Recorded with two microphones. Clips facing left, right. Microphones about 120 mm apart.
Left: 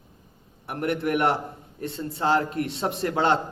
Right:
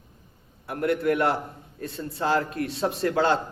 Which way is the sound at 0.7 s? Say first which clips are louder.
Right 2 dB; 25° left (ahead or behind).